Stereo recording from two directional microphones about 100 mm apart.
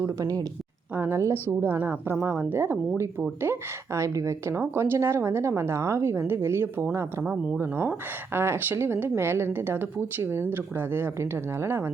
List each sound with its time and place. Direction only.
0.0 s speech: 35° right (ahead or behind)
0.9 s a woman's voice: 25° right (ahead or behind)